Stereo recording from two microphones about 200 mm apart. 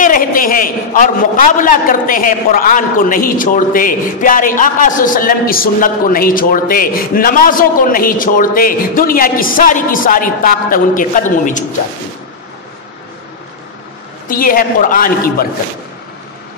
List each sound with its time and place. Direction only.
0.0 s a man's voice: 45° left (ahead or behind)
14.2 s a man's voice: 45° left (ahead or behind)